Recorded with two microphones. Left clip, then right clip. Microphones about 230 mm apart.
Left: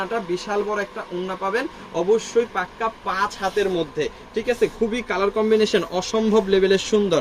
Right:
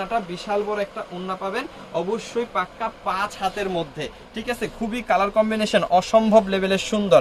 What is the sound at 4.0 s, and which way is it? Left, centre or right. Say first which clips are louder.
Speech: left 7 dB; right.